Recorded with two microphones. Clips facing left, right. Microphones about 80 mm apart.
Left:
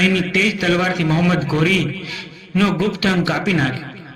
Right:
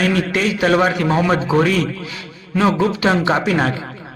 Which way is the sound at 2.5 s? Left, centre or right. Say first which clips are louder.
Right 2 dB; right.